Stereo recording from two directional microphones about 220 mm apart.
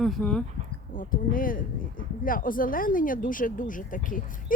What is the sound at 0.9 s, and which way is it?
Speech, 40° left (ahead or behind).